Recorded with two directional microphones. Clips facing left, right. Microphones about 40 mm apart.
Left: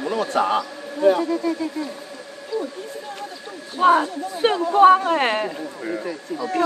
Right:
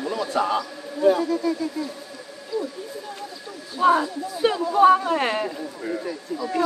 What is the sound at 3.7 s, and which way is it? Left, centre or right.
A woman's voice, left.